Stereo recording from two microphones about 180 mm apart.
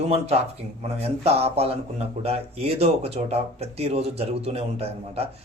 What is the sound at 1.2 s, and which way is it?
Speech, 35° right (ahead or behind).